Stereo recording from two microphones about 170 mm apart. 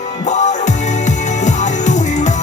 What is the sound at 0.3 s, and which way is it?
Music, 45° left (ahead or behind).